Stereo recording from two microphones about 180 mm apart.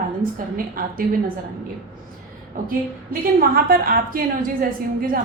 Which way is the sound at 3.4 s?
55° right (ahead or behind).